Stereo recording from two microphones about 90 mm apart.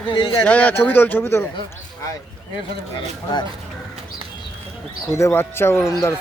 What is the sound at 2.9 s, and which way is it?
Speech, 55° left (ahead or behind).